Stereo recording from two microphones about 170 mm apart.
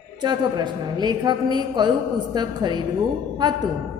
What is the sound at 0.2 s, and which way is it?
A woman's voice, 25° right (ahead or behind).